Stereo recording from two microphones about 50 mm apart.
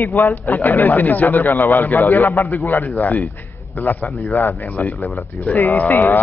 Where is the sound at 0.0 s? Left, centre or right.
Left.